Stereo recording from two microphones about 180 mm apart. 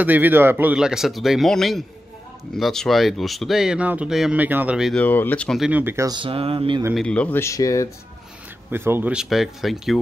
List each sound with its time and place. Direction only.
0.0 s speech: 10° right (ahead or behind)
5.0 s speech: 10° left (ahead or behind)
5.7 s speech: 10° right (ahead or behind); by 6.8 s 30° right (ahead or behind)
7.0 s speech: 5° left (ahead or behind)
8.7 s speech: 10° right (ahead or behind)